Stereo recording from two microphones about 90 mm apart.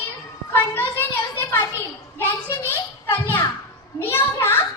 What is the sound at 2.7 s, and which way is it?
Children playing, 25° left (ahead or behind).